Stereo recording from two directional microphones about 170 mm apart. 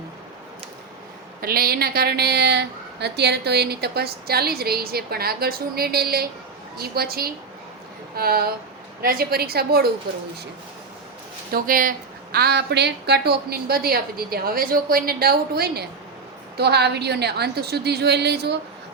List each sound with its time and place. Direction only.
1.4 s a woman's voice: 60° right (ahead or behind)
11.5 s a woman's voice: 55° right (ahead or behind); by 18.6 s 75° right (ahead or behind)